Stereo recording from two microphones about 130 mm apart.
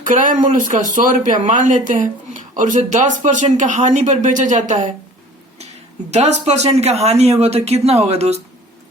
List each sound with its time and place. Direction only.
0.0 s speech: 90° right
6.1 s speech: 60° right (ahead or behind)